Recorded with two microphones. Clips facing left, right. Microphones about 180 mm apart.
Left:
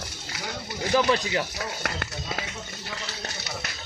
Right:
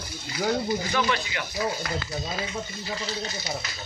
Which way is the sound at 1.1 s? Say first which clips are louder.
Left 5 dB; 35° left (ahead or behind).